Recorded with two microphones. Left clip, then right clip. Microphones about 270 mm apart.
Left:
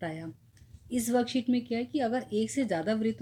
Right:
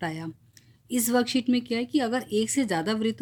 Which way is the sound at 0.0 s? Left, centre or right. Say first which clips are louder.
Right 5 dB; right.